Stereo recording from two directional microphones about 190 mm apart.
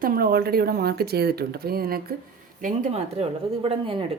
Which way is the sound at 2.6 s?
40° right (ahead or behind).